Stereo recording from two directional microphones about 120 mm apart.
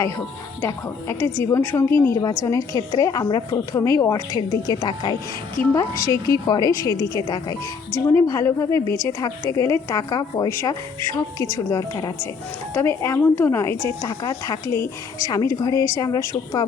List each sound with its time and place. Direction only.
0.6 s a woman's voice: 20° left (ahead or behind)